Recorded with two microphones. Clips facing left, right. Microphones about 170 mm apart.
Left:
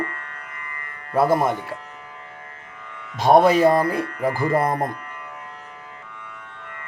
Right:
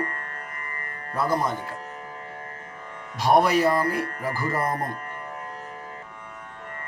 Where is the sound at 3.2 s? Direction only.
25° left (ahead or behind).